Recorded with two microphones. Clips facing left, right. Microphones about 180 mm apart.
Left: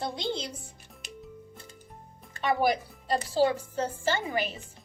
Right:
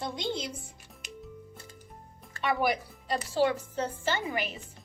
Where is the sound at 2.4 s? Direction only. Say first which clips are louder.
Left 2 dB; 35° left (ahead or behind).